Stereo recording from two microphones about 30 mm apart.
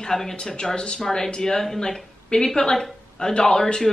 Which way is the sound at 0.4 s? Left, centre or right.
Left.